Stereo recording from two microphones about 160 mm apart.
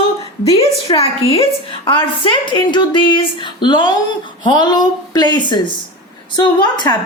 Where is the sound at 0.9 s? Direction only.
40° left (ahead or behind).